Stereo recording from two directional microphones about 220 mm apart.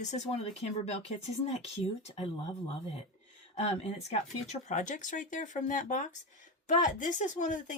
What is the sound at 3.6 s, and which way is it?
A woman's voice, 30° left (ahead or behind).